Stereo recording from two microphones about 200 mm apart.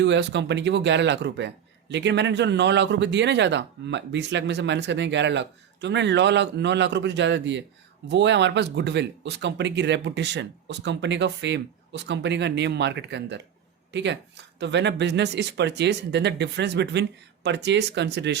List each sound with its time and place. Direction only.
0.0 s speech: 60° right (ahead or behind)